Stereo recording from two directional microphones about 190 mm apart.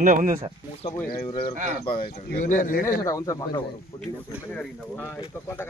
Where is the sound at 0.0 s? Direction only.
45° right (ahead or behind).